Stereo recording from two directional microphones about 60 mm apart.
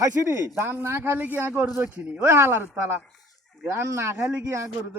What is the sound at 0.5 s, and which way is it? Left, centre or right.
Speech, right.